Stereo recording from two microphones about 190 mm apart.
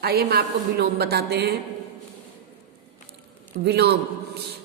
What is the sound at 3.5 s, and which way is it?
Speech, 60° right (ahead or behind).